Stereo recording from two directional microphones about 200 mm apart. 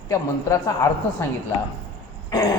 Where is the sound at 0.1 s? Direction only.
15° left (ahead or behind).